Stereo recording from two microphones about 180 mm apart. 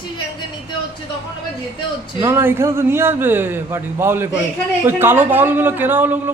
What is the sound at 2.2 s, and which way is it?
A man's voice, 15° right (ahead or behind).